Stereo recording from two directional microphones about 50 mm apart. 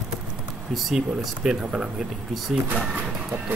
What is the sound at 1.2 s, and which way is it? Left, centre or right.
Speech, centre.